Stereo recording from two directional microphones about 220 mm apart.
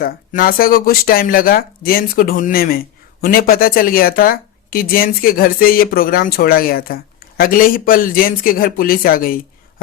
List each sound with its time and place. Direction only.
0.0 s speech: 40° left (ahead or behind)